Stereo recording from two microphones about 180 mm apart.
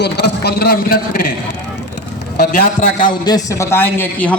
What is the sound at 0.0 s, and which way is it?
Speech, 65° left (ahead or behind).